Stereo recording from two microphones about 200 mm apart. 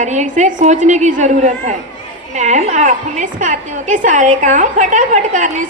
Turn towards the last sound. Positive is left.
turn(degrees=-40)  # may be behind; listen again after turning